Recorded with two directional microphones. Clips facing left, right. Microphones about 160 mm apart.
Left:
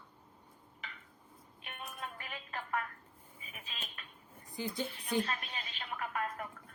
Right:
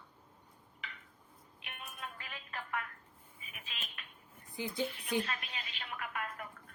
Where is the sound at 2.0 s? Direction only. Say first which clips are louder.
Left 1 dB; 35° left (ahead or behind).